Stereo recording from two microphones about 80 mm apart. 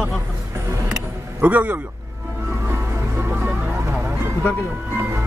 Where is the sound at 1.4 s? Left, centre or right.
Right.